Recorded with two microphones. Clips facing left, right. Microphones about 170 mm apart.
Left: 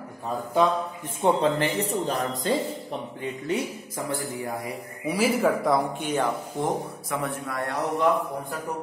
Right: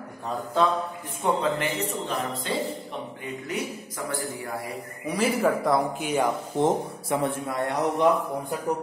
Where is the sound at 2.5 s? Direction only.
40° left (ahead or behind).